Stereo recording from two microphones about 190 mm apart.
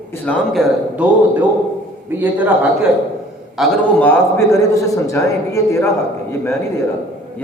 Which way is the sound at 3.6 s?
Centre (ahead or behind).